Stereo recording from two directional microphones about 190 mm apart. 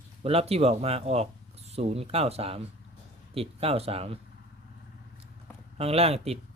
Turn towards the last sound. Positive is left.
turn(degrees=-30)  # may be behind; listen again after turning